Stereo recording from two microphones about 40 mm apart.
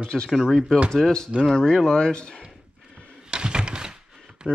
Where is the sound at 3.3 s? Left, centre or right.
Right.